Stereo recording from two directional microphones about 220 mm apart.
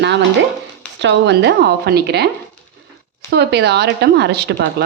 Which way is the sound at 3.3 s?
50° right (ahead or behind).